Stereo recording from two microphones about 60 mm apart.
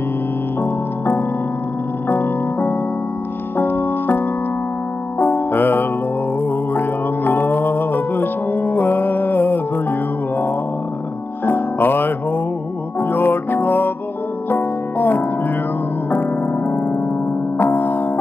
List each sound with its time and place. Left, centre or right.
0.6 s music: left